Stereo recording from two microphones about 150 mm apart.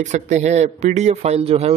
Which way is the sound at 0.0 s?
50° right (ahead or behind).